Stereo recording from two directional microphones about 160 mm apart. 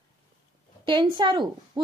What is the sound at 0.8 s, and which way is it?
Speech, 30° right (ahead or behind).